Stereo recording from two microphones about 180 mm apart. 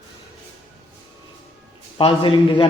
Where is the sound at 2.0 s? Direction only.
30° left (ahead or behind).